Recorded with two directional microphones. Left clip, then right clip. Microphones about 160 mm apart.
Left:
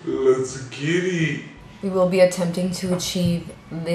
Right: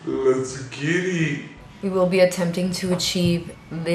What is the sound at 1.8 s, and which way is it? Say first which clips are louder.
A woman's voice: left 1 dB; centre (ahead or behind).